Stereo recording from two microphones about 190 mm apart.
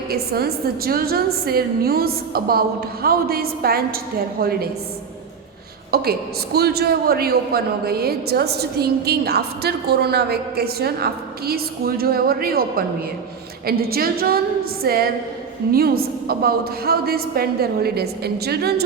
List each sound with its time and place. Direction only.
0.1 s a woman's voice: 55° right (ahead or behind)
5.9 s a man's voice: 55° right (ahead or behind)